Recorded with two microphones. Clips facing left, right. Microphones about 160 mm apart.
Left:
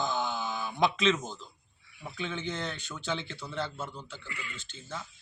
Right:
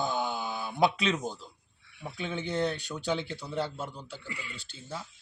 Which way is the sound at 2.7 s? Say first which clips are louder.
Right 5 dB; 40° right (ahead or behind).